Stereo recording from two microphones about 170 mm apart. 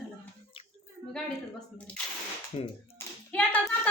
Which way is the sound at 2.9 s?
10° left (ahead or behind).